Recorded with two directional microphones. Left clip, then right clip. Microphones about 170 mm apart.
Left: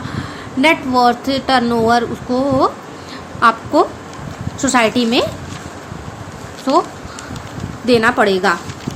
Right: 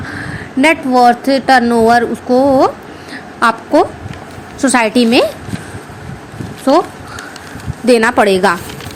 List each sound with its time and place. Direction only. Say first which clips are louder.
0.1 s a woman's voice: right 3 dB; 30° right (ahead or behind)
6.7 s a woman's voice: right 4 dB; 35° right (ahead or behind)
7.9 s a woman's voice: right 3 dB; 35° right (ahead or behind)